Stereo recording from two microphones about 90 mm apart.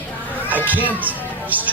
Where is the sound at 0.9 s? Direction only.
20° right (ahead or behind).